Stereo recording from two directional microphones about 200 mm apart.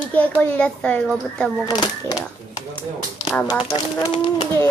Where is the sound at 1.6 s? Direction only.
20° left (ahead or behind).